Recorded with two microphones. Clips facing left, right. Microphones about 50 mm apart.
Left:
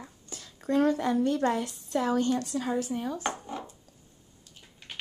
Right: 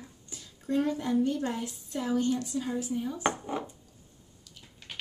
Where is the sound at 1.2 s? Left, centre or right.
Left.